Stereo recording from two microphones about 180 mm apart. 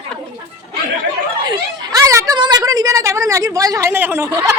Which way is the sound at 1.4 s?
20° right (ahead or behind).